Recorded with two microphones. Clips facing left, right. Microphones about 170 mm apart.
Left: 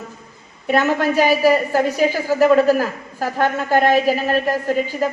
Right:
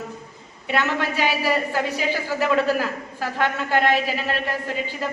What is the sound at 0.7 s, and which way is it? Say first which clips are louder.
A woman's voice: left 7 dB; 45° left (ahead or behind).